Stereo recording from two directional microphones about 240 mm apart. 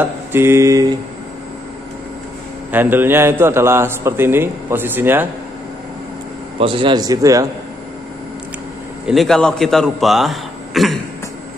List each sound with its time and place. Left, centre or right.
0.0 s a man's voice: centre
2.7 s a man's voice: centre
6.6 s a man's voice: right
9.0 s a man's voice: centre